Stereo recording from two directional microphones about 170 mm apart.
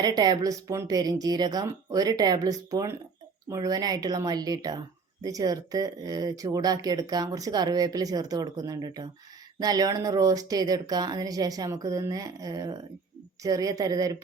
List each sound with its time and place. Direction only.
0.0 s speech: 25° right (ahead or behind)